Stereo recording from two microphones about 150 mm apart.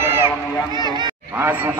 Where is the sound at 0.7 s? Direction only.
30° right (ahead or behind).